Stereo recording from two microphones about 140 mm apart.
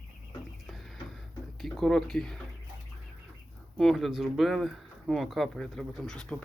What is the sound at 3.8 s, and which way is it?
Speech, centre (ahead or behind).